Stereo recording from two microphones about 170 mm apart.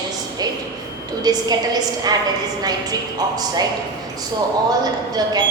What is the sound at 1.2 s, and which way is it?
Speech, 25° right (ahead or behind).